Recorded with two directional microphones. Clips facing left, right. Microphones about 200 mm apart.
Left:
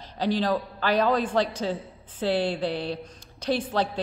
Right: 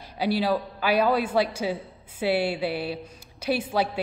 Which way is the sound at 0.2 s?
10° right (ahead or behind).